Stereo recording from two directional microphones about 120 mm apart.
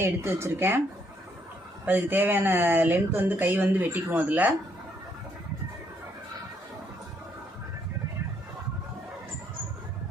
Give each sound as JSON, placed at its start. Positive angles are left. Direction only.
{"t": 0.0, "sound": "speech", "side_deg": -20}
{"t": 1.8, "sound": "speech", "side_deg": -15}